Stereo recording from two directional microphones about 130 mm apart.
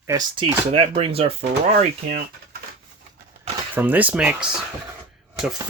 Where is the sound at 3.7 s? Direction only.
15° right (ahead or behind).